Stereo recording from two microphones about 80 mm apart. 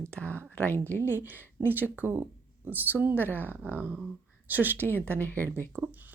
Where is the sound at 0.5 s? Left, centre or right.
Left.